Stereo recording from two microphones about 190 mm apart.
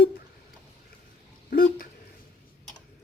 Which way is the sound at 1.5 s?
50° left (ahead or behind).